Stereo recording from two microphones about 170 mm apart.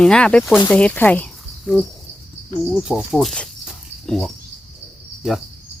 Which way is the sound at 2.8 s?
Centre (ahead or behind).